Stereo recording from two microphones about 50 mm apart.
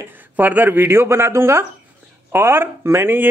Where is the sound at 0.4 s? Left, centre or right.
Right.